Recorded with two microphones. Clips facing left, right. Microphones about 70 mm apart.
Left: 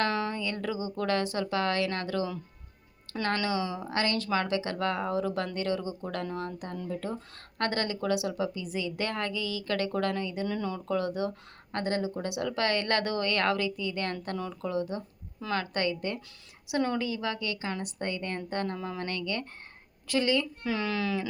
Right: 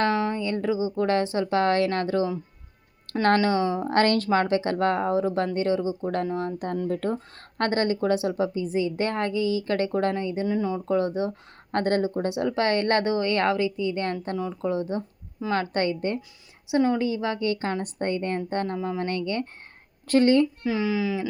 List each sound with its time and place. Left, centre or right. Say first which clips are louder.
0.0 s speech: right 5 dB; right
3.3 s a woman's voice: right 8 dB; right
6.6 s speech: right 8 dB; right
7.6 s a woman's voice: right 6 dB; right
10.4 s speech: right 6 dB; centre
10.8 s speech: right 3 dB; right
11.7 s a woman's voice: right 7 dB; right
18.8 s speech: right 7 dB; centre
19.0 s a woman's voice: right 6 dB; right
20.1 s speech: right 8 dB; right
20.7 s speech: right 5 dB; centre